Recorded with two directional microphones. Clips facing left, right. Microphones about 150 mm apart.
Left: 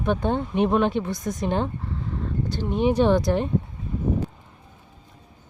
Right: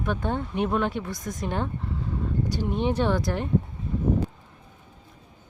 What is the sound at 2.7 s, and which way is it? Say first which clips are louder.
Speech: left 6 dB; 5° left (ahead or behind).